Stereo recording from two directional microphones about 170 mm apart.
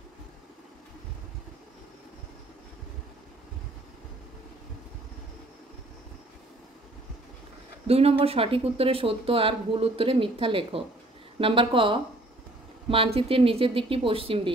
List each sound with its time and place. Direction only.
7.8 s speech: 35° right (ahead or behind)